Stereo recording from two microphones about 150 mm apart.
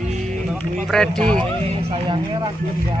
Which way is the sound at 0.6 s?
5° left (ahead or behind).